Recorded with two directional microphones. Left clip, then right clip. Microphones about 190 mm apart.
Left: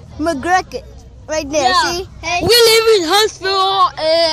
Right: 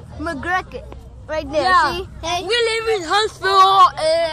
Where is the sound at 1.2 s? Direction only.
60° left (ahead or behind).